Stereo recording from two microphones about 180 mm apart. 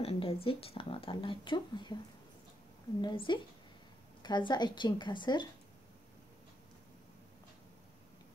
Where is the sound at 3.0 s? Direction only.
30° left (ahead or behind).